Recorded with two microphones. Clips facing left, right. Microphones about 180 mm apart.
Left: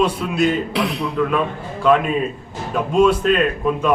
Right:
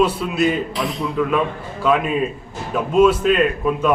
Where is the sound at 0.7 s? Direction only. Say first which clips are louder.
Left 3 dB; 65° left (ahead or behind).